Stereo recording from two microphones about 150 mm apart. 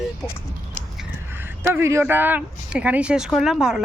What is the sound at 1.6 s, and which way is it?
Speech, 15° right (ahead or behind).